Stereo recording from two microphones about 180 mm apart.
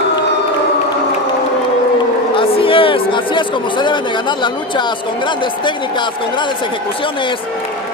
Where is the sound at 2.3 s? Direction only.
30° left (ahead or behind).